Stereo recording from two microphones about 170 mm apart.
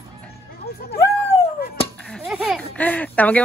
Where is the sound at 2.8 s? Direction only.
10° left (ahead or behind).